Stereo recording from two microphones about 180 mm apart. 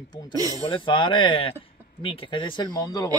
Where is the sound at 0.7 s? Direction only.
25° left (ahead or behind).